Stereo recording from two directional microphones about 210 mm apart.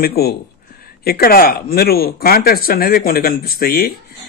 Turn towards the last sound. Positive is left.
turn(degrees=45)  # may be behind; listen again after turning